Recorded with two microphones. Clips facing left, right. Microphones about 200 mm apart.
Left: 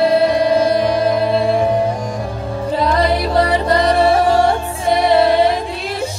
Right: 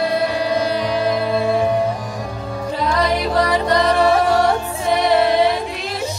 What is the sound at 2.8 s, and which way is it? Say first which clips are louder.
Music: left 2 dB; 35° left (ahead or behind).